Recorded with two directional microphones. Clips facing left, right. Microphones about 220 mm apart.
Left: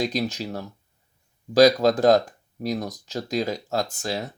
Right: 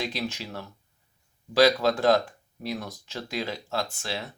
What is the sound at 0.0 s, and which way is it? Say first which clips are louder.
Speech: left 6 dB; 40° left (ahead or behind).